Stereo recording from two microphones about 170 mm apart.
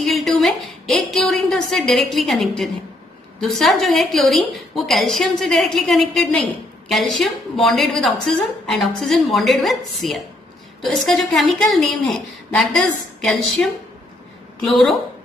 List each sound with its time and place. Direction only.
0.0 s a sound: centre (ahead or behind)
3.3 s a woman's voice: centre (ahead or behind)
13.2 s a woman's voice: centre (ahead or behind)
14.7 s a woman's voice: centre (ahead or behind)